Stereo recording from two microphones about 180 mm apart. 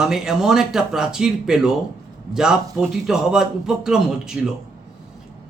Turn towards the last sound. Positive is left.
turn(degrees=-5)  # may be behind; listen again after turning